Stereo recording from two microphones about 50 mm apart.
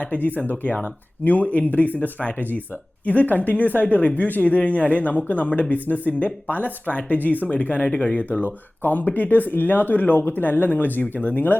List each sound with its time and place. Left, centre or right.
0.0 s speech: left